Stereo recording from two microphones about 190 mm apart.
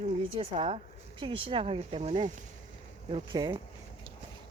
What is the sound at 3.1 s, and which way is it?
Speech, 25° right (ahead or behind).